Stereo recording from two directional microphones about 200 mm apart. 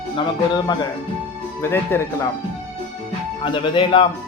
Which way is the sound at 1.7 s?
10° left (ahead or behind).